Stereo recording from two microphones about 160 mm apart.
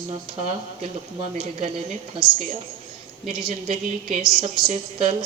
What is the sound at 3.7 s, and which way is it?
Speech, 50° right (ahead or behind).